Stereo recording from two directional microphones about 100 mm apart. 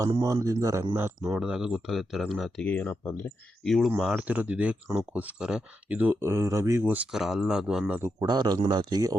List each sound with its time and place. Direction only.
0.2 s a man's voice: 30° right (ahead or behind)
1.2 s speech: 5° right (ahead or behind)
2.6 s speech: 15° left (ahead or behind); by 4.2 s centre (ahead or behind)
4.2 s speech: 15° right (ahead or behind)
7.1 s speech: 5° right (ahead or behind)
7.9 s speech: 25° right (ahead or behind)
8.3 s speech: 45° right (ahead or behind)